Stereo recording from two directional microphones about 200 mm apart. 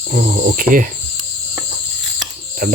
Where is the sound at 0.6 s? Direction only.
45° right (ahead or behind).